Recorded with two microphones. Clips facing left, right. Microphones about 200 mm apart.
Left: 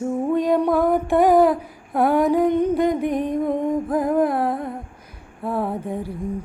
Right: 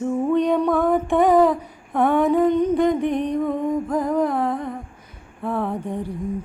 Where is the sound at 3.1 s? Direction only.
45° left (ahead or behind).